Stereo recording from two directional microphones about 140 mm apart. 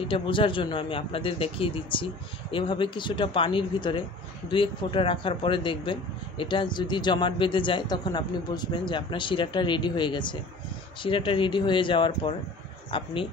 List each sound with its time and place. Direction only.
0.1 s speech: 40° left (ahead or behind)